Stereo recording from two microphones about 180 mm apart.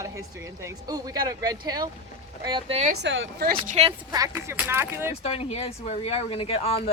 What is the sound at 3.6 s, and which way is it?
Speech, 35° right (ahead or behind).